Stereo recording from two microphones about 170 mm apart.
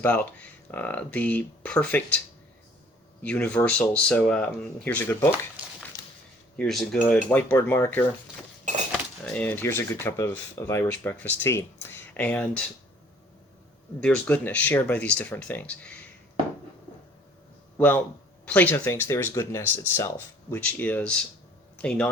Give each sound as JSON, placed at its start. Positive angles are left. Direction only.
{"t": 0.0, "sound": "speech", "side_deg": 10}
{"t": 5.6, "sound": "a sound", "side_deg": -10}
{"t": 6.6, "sound": "speech", "side_deg": 0}
{"t": 14.0, "sound": "speech", "side_deg": 5}
{"t": 17.7, "sound": "speech", "side_deg": 10}